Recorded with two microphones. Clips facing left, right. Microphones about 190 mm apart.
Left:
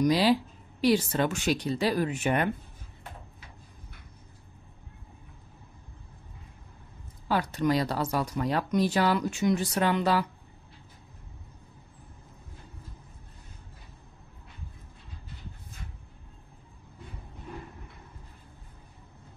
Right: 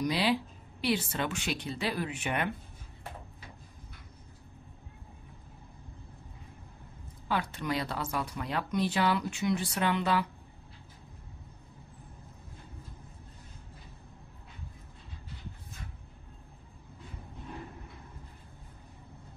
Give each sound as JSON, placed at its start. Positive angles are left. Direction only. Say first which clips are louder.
{"t": 0.0, "sound": "speech", "louder": "left 6 dB", "side_deg": 40}
{"t": 7.2, "sound": "speech", "louder": "left 6 dB", "side_deg": 40}